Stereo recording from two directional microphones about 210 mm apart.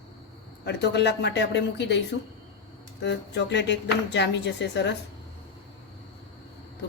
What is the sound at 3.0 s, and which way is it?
Speech, 55° left (ahead or behind).